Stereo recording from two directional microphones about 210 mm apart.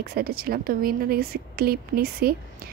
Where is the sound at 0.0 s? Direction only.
45° right (ahead or behind).